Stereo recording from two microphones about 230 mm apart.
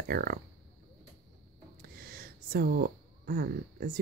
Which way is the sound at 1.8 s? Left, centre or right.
Right.